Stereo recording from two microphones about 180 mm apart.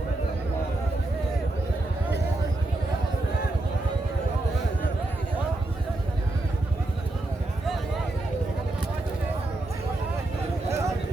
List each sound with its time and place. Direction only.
10.7 s vehicle: 15° right (ahead or behind)